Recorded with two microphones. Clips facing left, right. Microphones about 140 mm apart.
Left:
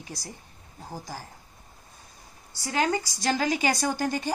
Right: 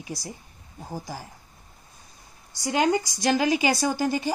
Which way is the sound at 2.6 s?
15° right (ahead or behind).